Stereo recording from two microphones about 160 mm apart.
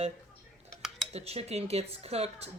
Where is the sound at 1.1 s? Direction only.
40° right (ahead or behind).